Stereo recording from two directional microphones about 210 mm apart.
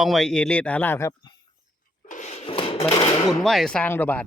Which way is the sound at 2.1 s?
35° left (ahead or behind).